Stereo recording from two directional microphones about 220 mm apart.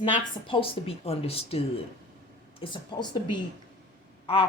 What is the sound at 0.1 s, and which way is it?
Speech, 25° left (ahead or behind).